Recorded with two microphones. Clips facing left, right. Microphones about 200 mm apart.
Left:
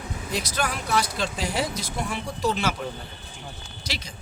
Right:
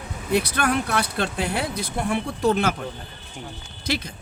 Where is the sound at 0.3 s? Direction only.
60° right (ahead or behind).